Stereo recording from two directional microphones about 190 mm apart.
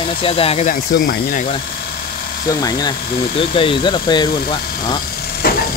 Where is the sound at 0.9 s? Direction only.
45° left (ahead or behind).